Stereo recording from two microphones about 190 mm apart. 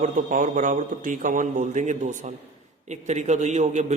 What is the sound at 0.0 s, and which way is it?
A man's voice, 45° right (ahead or behind).